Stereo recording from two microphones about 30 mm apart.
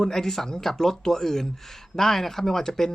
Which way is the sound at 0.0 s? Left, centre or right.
Centre.